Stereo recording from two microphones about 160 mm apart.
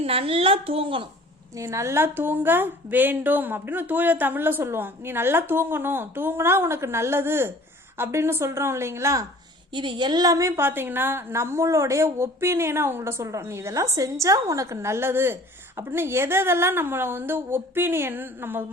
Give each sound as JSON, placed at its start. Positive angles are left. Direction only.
{"t": 0.0, "sound": "a woman's voice", "side_deg": -35}
{"t": 1.5, "sound": "a woman's voice", "side_deg": -20}
{"t": 9.7, "sound": "a woman's voice", "side_deg": -30}